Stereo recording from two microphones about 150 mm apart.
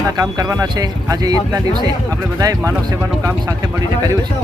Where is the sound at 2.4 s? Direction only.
25° right (ahead or behind).